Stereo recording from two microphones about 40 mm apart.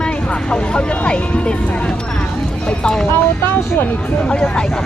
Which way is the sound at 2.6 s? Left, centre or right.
Left.